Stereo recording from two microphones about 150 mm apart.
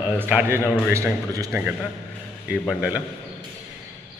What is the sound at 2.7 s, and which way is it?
Speech, 10° right (ahead or behind).